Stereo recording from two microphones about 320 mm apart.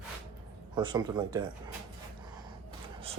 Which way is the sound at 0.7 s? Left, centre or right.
Centre.